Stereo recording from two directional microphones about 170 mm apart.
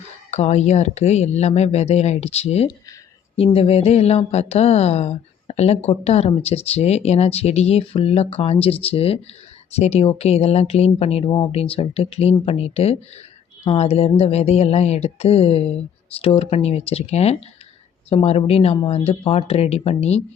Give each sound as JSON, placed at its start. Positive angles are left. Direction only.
{"t": 0.3, "sound": "speech", "side_deg": 40}